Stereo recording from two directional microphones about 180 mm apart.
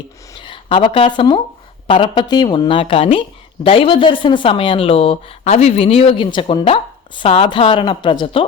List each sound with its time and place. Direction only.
0.3 s speech: 30° left (ahead or behind)